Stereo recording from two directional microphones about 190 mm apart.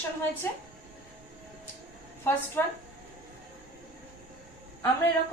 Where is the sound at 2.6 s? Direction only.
10° left (ahead or behind).